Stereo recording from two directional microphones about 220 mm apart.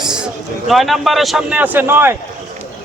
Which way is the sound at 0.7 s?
Centre (ahead or behind).